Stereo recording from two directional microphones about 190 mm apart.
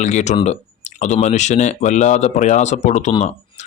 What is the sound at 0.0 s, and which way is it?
Speech, 40° left (ahead or behind).